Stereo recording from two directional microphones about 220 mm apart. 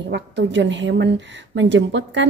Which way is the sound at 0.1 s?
55° right (ahead or behind).